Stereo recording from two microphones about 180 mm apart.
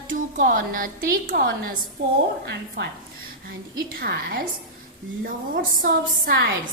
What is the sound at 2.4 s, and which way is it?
Speech, 70° right (ahead or behind).